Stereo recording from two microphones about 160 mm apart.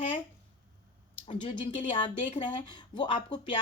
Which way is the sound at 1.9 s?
30° left (ahead or behind).